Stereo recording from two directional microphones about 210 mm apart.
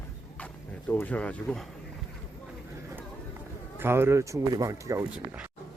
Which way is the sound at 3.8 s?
10° right (ahead or behind).